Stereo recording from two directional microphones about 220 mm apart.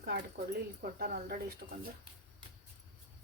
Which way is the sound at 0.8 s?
45° right (ahead or behind).